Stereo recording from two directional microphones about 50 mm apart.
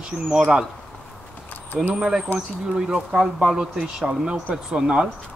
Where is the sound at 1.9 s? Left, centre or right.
Centre.